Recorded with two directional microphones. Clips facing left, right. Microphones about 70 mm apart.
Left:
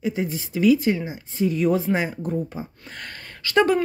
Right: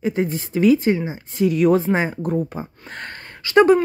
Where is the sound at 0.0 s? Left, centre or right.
Right.